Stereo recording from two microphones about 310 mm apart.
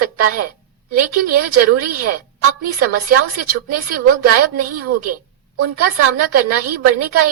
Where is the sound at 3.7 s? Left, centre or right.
Right.